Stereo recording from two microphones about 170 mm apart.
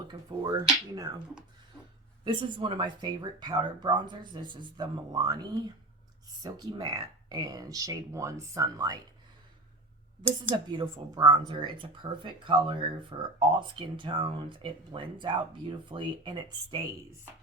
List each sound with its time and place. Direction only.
0.1 s speech: 25° right (ahead or behind)
2.2 s speech: 30° right (ahead or behind)
10.2 s speech: 10° right (ahead or behind)
10.7 s speech: 30° right (ahead or behind)